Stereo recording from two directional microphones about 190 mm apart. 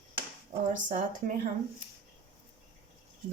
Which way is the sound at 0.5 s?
45° right (ahead or behind).